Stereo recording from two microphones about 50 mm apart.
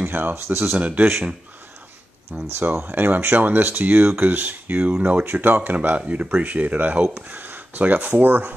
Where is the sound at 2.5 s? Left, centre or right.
Right.